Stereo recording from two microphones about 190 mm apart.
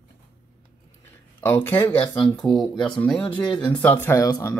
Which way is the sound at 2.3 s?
Centre (ahead or behind).